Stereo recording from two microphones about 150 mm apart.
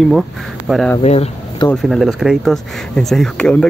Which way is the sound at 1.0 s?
45° left (ahead or behind).